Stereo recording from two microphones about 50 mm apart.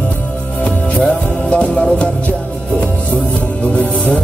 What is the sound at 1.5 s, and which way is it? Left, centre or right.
Music, left.